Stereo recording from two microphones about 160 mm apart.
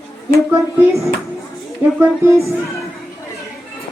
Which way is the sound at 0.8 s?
20° right (ahead or behind).